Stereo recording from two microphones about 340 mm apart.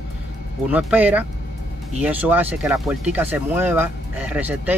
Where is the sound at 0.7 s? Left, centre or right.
Centre.